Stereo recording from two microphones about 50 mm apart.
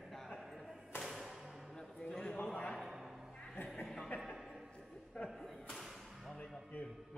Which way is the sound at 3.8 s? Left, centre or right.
Centre.